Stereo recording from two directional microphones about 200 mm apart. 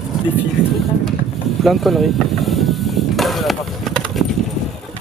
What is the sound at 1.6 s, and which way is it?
Mechanisms, centre (ahead or behind).